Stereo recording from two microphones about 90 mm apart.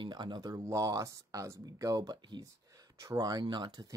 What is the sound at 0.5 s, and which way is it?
Speech, 40° right (ahead or behind).